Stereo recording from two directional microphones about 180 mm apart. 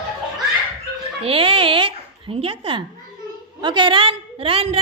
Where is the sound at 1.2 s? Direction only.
30° right (ahead or behind).